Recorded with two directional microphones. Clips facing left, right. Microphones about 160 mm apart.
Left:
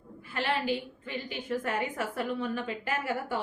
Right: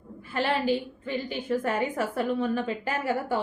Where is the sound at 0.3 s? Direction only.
35° right (ahead or behind).